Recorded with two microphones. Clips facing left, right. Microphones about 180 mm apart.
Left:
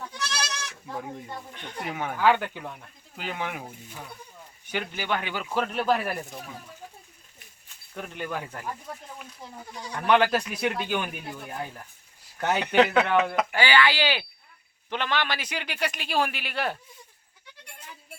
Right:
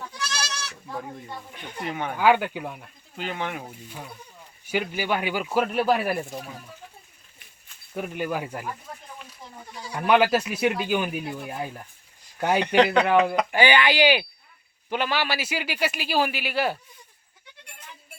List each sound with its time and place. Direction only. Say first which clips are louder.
0.4 s goat: right 1 dB; 15° left (ahead or behind)
0.9 s speech: even; 5° left (ahead or behind)
1.5 s speech: right 1 dB; 10° right (ahead or behind)
1.8 s speech: right 2 dB; 5° left (ahead or behind)
2.1 s speech: right 3 dB; 10° right (ahead or behind)
3.2 s speech: right 2 dB; 5° left (ahead or behind)
4.6 s speech: right 5 dB; 10° right (ahead or behind)
7.9 s speech: right 5 dB; 10° right (ahead or behind)
9.6 s a man's voice: right 1 dB; 5° right (ahead or behind)
12.6 s speech: even; 5° left (ahead or behind)
13.5 s speech: right 2 dB; 20° right (ahead or behind)